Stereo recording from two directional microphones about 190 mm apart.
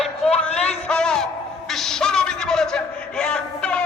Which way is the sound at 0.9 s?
5° left (ahead or behind).